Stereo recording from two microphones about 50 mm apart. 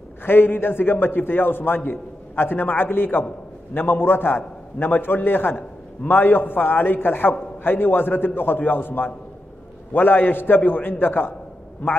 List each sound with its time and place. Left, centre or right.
0.2 s a man's voice: left